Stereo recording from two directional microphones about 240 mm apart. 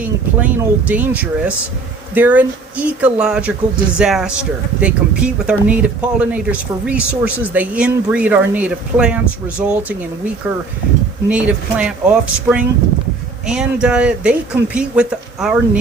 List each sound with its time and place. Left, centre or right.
0.0 s speech: centre
11.3 s speech: centre